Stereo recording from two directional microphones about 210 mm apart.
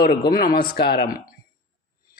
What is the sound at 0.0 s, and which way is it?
A man's voice, 50° left (ahead or behind).